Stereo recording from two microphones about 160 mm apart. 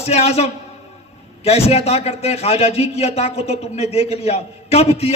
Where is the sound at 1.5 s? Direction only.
40° left (ahead or behind).